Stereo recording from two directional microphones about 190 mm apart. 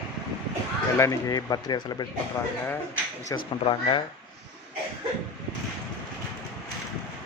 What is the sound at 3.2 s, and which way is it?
Speech, 25° left (ahead or behind).